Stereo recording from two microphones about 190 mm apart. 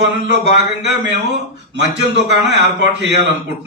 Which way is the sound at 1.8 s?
65° right (ahead or behind).